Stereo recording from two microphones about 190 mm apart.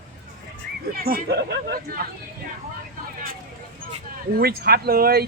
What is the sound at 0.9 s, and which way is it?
Speech, 50° right (ahead or behind).